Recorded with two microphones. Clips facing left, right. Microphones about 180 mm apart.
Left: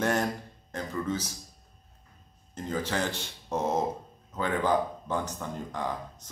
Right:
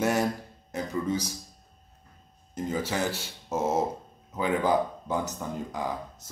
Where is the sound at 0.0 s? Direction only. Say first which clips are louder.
Right 2 dB; 10° right (ahead or behind).